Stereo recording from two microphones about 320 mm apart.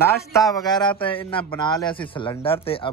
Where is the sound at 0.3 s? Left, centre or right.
Centre.